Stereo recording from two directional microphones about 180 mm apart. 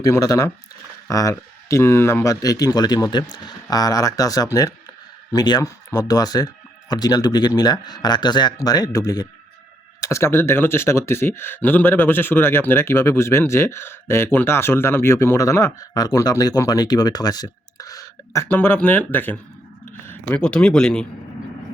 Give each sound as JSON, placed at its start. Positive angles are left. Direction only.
{"t": 0.0, "sound": "speech", "side_deg": 20}